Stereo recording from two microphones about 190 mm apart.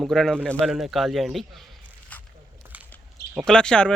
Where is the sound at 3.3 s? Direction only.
5° left (ahead or behind).